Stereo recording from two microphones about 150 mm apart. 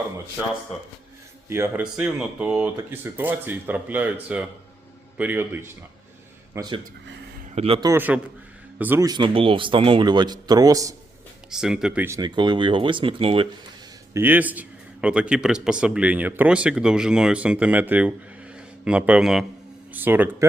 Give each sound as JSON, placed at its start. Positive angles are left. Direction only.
{"t": 1.5, "sound": "a man's voice", "side_deg": -15}
{"t": 6.5, "sound": "speech", "side_deg": -25}
{"t": 7.5, "sound": "speech", "side_deg": -40}
{"t": 7.9, "sound": "a man's voice", "side_deg": -10}
{"t": 9.0, "sound": "speech", "side_deg": -30}
{"t": 11.5, "sound": "speech", "side_deg": -5}
{"t": 12.0, "sound": "speech", "side_deg": -25}
{"t": 14.1, "sound": "a man's voice", "side_deg": -15}